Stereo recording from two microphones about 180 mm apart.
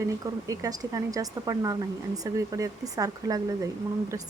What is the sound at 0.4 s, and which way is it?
Speech, 20° right (ahead or behind).